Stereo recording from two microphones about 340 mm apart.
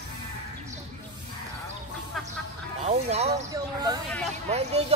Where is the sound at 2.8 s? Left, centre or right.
Centre.